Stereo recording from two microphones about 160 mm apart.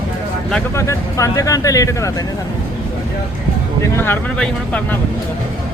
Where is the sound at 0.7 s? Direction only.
20° left (ahead or behind).